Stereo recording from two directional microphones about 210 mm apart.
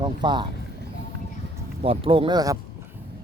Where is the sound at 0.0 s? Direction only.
20° right (ahead or behind).